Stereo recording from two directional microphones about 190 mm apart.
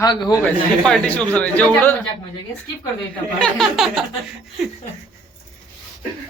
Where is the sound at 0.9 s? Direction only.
5° left (ahead or behind).